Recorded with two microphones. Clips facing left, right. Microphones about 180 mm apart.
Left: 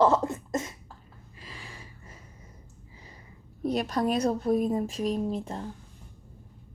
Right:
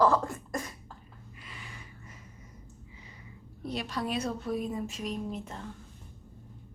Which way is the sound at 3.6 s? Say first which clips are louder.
Left 7 dB; 45° left (ahead or behind).